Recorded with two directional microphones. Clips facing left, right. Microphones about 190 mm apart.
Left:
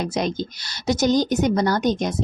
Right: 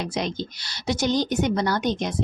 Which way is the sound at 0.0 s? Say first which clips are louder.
Left 4 dB; 45° left (ahead or behind).